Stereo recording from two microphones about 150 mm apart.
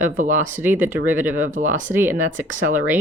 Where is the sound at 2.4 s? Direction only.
60° right (ahead or behind).